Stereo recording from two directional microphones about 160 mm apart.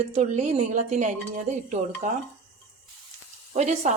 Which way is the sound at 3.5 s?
45° right (ahead or behind).